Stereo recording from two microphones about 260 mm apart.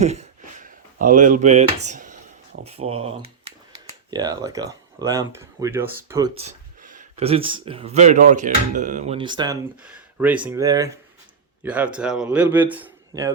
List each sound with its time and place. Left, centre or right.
0.0 s a sound: right
2.6 s speech: right
9.8 s a man's voice: centre